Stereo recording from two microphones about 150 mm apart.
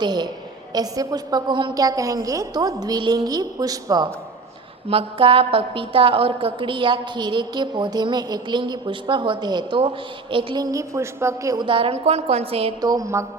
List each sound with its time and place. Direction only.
0.0 s a woman's voice: 30° right (ahead or behind)
4.9 s a woman's voice: 40° right (ahead or behind)
12.8 s a woman's voice: 25° right (ahead or behind)